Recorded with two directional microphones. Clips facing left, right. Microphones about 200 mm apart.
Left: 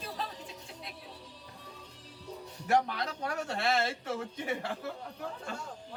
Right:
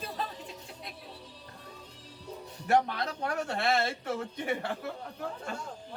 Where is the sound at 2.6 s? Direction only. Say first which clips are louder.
Right 2 dB; 55° right (ahead or behind).